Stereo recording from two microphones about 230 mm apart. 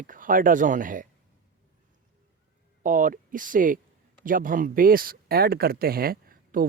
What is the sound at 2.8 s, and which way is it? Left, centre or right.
Speech, right.